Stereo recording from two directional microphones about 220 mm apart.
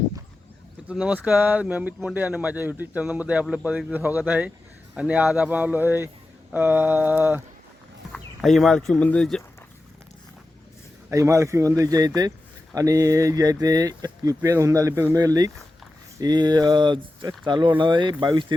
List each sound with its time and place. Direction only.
0.9 s speech: 5° right (ahead or behind)
8.1 s speech: centre (ahead or behind)
11.1 s speech: 15° right (ahead or behind)